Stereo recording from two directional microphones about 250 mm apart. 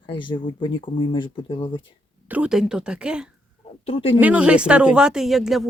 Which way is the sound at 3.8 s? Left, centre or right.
Left.